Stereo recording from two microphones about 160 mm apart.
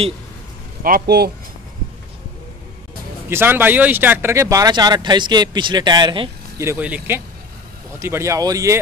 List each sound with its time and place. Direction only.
0.8 s speech: 75° right (ahead or behind)
3.3 s speech: 15° right (ahead or behind); by 6.3 s 30° right (ahead or behind)
6.6 s speech: 10° right (ahead or behind)